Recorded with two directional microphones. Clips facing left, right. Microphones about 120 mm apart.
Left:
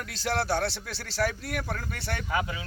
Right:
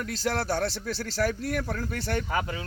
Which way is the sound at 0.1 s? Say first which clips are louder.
Left 1 dB; 40° right (ahead or behind).